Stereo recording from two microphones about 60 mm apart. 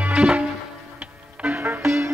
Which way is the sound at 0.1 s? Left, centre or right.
Centre.